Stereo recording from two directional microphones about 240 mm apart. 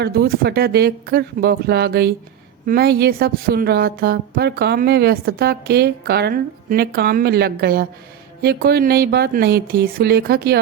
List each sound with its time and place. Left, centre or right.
0.0 s a woman's voice: right